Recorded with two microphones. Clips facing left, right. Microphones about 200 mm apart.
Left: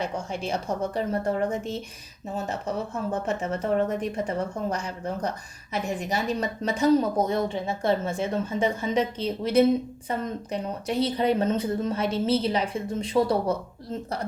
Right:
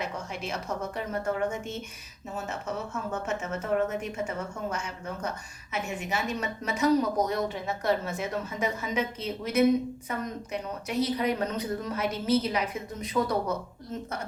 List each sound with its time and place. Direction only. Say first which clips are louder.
0.0 s a woman's voice: left 5 dB; 30° left (ahead or behind)